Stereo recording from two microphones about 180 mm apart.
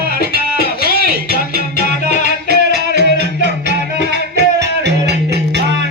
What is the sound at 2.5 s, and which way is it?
Music, 65° right (ahead or behind).